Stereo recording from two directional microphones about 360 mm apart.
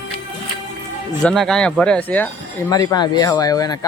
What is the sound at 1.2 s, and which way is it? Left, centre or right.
Speech, centre.